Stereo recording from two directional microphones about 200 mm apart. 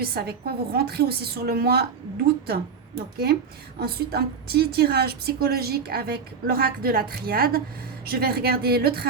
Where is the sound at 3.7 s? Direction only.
50° right (ahead or behind).